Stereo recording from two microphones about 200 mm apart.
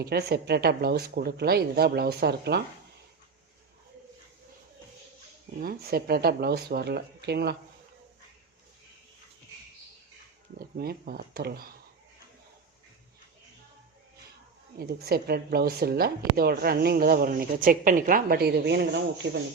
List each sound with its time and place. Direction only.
0.0 s a woman's voice: 50° right (ahead or behind)
5.5 s a woman's voice: 50° right (ahead or behind)
10.8 s a woman's voice: 50° right (ahead or behind)
14.8 s a woman's voice: 50° right (ahead or behind)